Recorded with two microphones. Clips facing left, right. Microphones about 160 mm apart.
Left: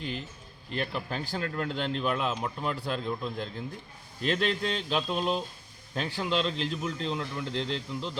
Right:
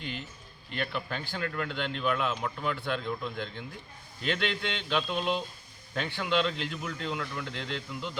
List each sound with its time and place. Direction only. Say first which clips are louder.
0.7 s a man's voice: left 1 dB; 35° left (ahead or behind)